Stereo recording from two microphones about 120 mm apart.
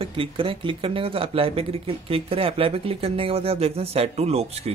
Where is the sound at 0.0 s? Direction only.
50° right (ahead or behind).